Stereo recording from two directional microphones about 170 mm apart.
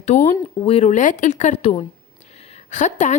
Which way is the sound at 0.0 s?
45° left (ahead or behind).